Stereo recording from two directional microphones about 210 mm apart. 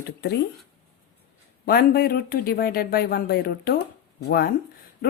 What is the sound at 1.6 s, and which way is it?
Speech, 45° left (ahead or behind).